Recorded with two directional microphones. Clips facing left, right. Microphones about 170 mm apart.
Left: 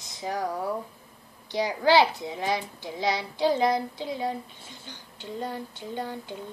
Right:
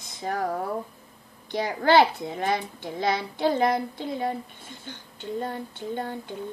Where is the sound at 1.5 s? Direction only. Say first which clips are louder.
Right 1 dB; 55° right (ahead or behind).